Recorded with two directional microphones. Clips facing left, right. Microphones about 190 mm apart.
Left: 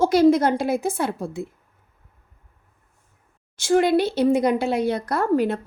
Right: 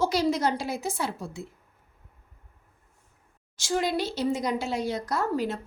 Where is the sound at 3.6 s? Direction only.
60° left (ahead or behind).